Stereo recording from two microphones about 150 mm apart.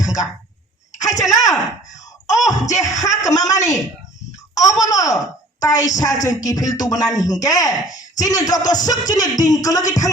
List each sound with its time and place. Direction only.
0.0 s a sound: 20° left (ahead or behind)
1.0 s music: 25° left (ahead or behind)
4.8 s music: 20° left (ahead or behind)
5.5 s a woman's voice: 25° left (ahead or behind)
6.0 s music: 25° left (ahead or behind)